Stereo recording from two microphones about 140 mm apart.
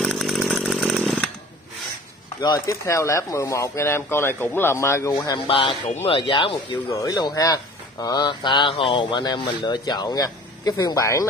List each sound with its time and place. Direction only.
0.0 s chainsaw: centre (ahead or behind)
2.4 s speech: 25° left (ahead or behind)
6.9 s speech: 25° left (ahead or behind)